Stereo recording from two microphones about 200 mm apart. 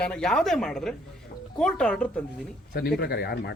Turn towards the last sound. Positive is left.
turn(degrees=55)  # may be behind; listen again after turning